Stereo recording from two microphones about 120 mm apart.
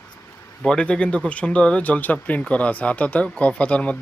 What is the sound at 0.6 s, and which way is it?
Speech, 5° left (ahead or behind).